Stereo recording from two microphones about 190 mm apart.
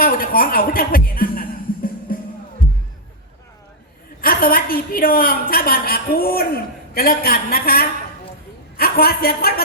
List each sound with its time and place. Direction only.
0.0 s music: 50° left (ahead or behind)
4.2 s a woman's voice: 50° left (ahead or behind)